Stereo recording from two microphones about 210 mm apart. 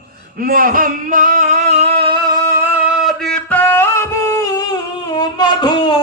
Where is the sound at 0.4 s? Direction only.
40° right (ahead or behind); by 2.3 s 25° right (ahead or behind).